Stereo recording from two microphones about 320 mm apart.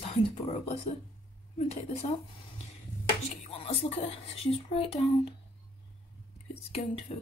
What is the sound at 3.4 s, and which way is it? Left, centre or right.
Speech, centre.